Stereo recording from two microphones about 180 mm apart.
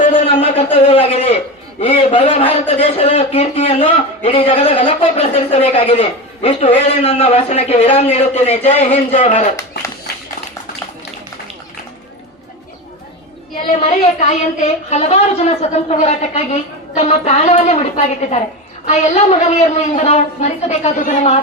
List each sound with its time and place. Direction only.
0.0 s a man's voice: 40° left (ahead or behind)
13.7 s a man's voice: 35° left (ahead or behind)